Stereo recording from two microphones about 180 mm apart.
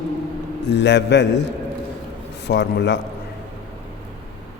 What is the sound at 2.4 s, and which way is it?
Speech, 70° left (ahead or behind).